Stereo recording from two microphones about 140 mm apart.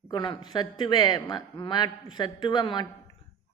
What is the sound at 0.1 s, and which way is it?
A man's voice, 30° left (ahead or behind).